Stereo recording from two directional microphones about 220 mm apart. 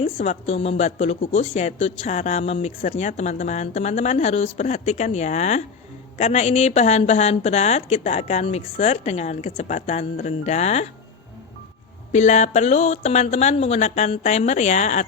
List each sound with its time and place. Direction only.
0.0 s a woman's voice: 25° left (ahead or behind)
12.1 s speech: 30° left (ahead or behind)